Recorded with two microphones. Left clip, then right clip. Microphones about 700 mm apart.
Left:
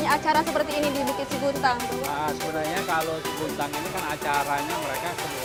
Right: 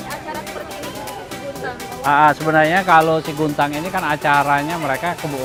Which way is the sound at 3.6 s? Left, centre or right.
Right.